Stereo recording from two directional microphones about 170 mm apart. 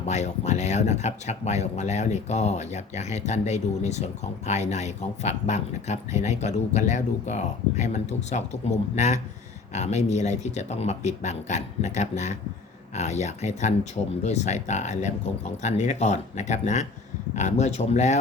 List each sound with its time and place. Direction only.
0.0 s speech: 40° left (ahead or behind)